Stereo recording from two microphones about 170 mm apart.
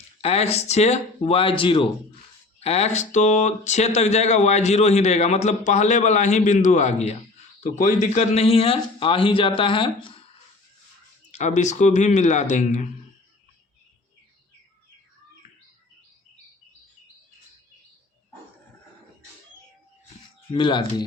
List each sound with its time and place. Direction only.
0.2 s speech: 40° left (ahead or behind)
11.3 s speech: 45° left (ahead or behind)
20.5 s speech: 30° left (ahead or behind)